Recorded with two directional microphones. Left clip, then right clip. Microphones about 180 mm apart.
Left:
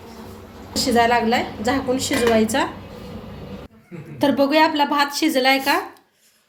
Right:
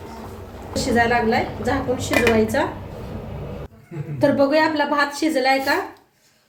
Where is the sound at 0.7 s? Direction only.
50° left (ahead or behind).